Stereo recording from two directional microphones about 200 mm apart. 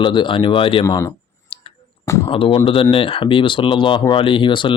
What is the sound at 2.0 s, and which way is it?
Speech, 15° left (ahead or behind).